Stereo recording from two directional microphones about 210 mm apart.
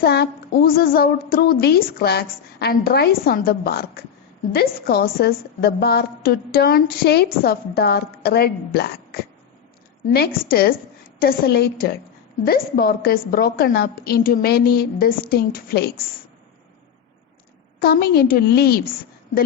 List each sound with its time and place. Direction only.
0.0 s a woman's voice: 50° left (ahead or behind)
17.7 s a woman's voice: 50° left (ahead or behind)